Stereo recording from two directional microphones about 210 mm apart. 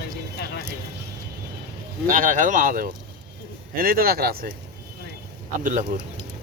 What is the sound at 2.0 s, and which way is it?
Speech, 40° right (ahead or behind).